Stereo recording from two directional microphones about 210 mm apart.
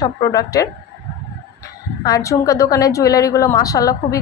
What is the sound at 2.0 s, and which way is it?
A woman's voice, 15° left (ahead or behind).